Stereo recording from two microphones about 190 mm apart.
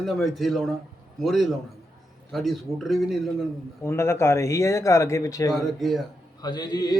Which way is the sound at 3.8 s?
15° left (ahead or behind).